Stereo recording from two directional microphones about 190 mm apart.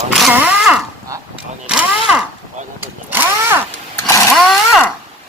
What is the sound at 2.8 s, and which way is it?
Vehicle, 10° right (ahead or behind).